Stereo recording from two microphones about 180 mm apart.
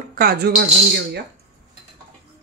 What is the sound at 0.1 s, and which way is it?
Speech, 55° right (ahead or behind).